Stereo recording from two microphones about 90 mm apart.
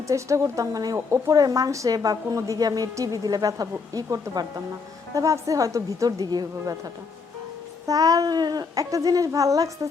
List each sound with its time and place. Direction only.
0.1 s a woman's voice: 35° right (ahead or behind)